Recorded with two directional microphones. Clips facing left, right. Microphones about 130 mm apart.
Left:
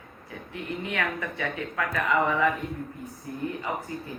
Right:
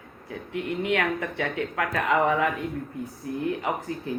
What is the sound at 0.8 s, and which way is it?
Speech, 65° right (ahead or behind).